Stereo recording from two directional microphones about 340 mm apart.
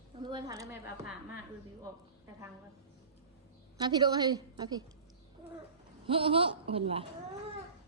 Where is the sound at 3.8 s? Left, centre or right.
Centre.